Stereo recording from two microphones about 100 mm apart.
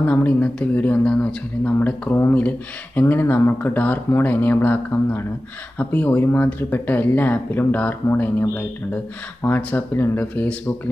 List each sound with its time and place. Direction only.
0.0 s speech: 15° left (ahead or behind)